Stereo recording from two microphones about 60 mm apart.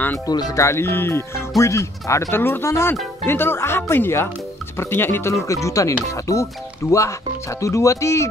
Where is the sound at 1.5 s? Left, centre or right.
Left.